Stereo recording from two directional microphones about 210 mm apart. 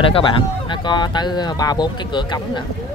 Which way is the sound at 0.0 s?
25° left (ahead or behind).